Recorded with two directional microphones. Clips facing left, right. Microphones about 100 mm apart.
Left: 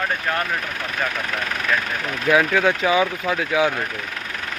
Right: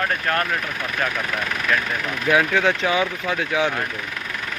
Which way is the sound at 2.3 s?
Centre (ahead or behind).